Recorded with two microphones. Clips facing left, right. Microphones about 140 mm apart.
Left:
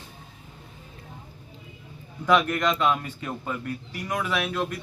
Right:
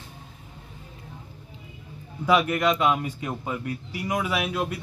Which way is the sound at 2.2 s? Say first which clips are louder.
Right 1 dB; 10° right (ahead or behind).